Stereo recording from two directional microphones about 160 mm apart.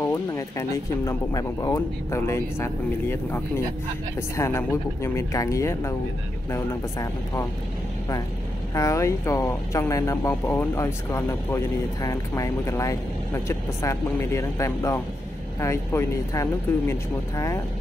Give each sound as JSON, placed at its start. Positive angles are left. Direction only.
{"t": 0.0, "sound": "speech", "side_deg": 20}
{"t": 8.7, "sound": "speech", "side_deg": 20}